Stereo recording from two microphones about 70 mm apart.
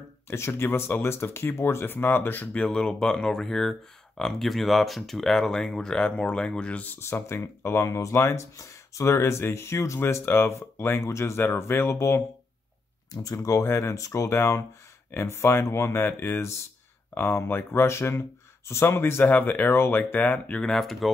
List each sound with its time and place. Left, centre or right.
0.3 s speech: left
2.6 s speech: centre; by 12.2 s left
13.1 s speech: left; by 20.6 s centre
20.6 s speech: centre